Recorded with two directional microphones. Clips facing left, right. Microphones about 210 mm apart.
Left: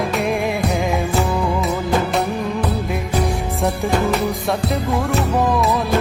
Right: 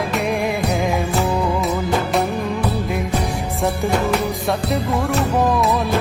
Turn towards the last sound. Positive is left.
turn(degrees=0)  # may be behind; listen again after turning